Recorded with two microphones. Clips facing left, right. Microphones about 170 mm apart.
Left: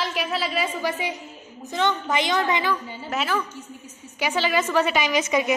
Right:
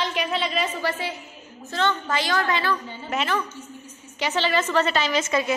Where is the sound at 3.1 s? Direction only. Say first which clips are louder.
Even; centre (ahead or behind).